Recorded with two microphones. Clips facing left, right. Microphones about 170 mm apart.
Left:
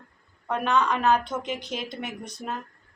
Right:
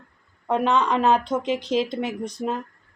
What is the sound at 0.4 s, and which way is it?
A woman's voice, 25° right (ahead or behind).